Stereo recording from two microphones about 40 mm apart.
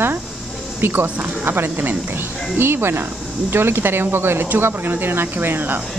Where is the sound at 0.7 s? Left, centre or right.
Right.